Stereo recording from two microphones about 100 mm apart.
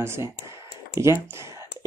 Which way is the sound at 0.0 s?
25° right (ahead or behind).